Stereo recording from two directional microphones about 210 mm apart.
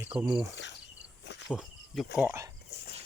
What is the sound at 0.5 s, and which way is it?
Cricket, 55° left (ahead or behind).